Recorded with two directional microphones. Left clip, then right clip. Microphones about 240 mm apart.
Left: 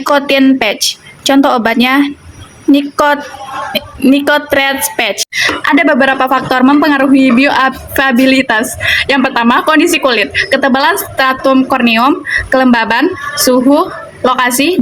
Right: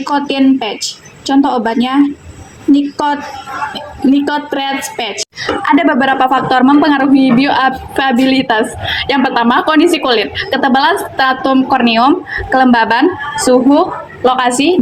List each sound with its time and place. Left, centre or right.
0.0 s a woman's voice: left